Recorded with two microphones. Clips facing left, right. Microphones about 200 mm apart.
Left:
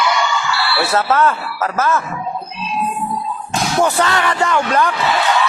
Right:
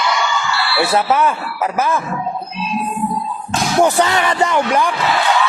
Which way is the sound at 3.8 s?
15° right (ahead or behind).